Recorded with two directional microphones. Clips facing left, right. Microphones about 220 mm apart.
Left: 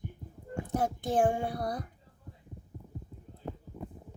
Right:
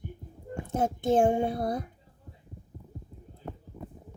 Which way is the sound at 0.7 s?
25° right (ahead or behind).